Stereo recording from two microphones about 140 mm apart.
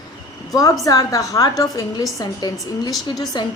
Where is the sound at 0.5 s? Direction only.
25° left (ahead or behind).